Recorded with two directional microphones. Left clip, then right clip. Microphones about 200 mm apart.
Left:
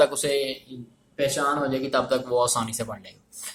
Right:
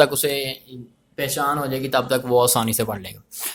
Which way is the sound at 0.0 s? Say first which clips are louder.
Right 3 dB; 45° right (ahead or behind).